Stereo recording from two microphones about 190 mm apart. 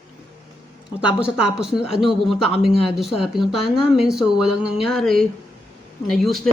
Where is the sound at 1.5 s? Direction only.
5° right (ahead or behind).